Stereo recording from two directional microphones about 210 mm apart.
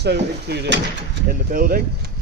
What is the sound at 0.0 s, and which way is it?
Speech, 50° right (ahead or behind).